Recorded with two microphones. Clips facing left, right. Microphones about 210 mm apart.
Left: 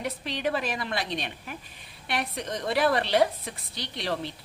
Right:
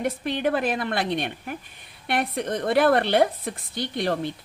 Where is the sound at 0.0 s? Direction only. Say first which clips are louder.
Right 5 dB; 50° right (ahead or behind).